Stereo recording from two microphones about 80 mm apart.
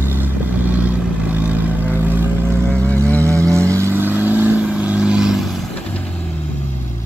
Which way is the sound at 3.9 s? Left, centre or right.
Right.